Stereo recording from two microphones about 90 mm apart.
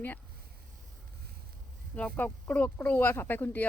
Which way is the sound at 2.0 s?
15° left (ahead or behind).